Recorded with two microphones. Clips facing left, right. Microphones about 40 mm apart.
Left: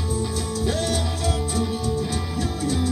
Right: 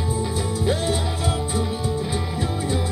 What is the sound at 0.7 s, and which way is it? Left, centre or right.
Music, right.